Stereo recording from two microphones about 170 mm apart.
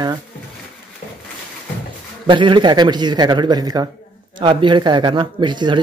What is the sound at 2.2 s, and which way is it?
Speech, 30° right (ahead or behind).